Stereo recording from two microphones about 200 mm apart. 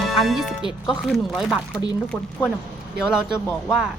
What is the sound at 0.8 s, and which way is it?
Speech, centre (ahead or behind).